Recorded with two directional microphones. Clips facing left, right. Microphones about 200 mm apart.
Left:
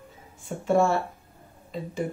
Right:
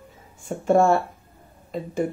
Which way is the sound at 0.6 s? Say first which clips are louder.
Right 4 dB; 50° right (ahead or behind).